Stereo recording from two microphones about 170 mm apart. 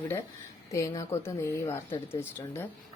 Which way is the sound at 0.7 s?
15° left (ahead or behind).